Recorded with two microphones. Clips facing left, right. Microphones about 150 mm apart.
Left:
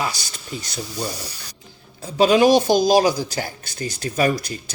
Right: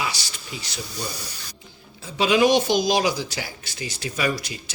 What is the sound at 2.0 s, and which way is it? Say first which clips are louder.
Speech: left 4 dB; 40° left (ahead or behind).